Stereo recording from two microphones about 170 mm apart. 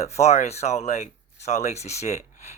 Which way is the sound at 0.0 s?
40° left (ahead or behind).